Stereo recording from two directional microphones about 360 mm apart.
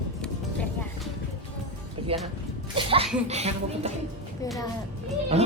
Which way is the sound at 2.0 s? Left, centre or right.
Centre.